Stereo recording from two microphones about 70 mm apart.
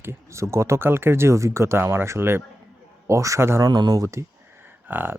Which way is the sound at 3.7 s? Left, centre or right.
Right.